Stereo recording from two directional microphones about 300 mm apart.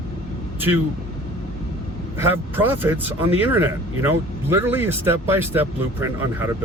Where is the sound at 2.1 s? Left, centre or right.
Centre.